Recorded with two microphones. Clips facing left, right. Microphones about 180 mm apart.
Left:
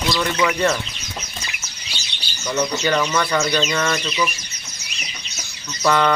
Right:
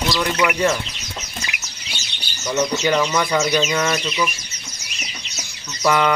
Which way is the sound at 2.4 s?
5° right (ahead or behind).